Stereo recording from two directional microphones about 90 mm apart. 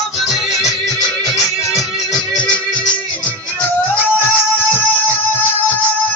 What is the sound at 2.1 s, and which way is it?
Music, 10° left (ahead or behind).